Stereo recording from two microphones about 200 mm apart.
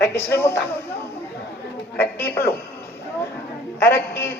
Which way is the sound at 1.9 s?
10° left (ahead or behind).